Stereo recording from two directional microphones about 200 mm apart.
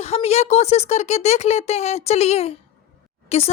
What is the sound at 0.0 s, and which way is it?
Speech, 30° left (ahead or behind).